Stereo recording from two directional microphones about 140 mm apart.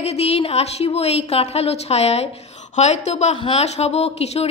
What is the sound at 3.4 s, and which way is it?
Speech, 45° left (ahead or behind).